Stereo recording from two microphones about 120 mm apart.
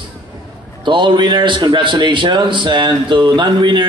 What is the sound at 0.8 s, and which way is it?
A man's voice, 40° right (ahead or behind).